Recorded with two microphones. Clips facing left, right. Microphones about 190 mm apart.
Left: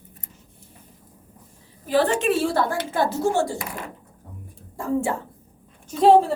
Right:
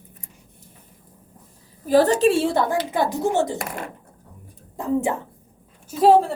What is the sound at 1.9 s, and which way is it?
Speech, 40° right (ahead or behind).